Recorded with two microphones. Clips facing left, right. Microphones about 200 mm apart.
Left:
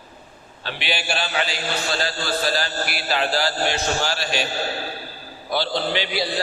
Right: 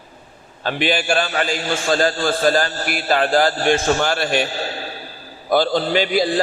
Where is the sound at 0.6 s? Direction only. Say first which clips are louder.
Right 8 dB; 50° right (ahead or behind).